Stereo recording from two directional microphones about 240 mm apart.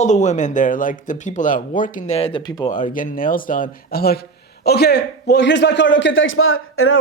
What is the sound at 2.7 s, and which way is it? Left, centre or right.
A man's voice, left.